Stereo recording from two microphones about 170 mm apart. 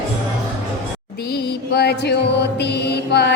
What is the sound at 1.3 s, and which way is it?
Music, 70° left (ahead or behind).